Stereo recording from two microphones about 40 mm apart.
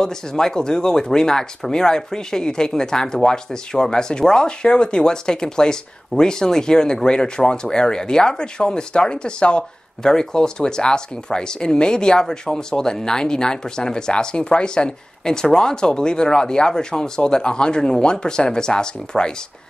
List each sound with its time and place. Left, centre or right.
0.0 s speech: centre